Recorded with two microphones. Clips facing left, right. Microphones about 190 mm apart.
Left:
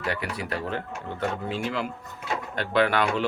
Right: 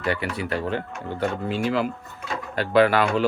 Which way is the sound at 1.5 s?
Centre (ahead or behind).